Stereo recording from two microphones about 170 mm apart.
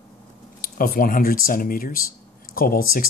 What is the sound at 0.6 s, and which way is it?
Speech, 55° left (ahead or behind).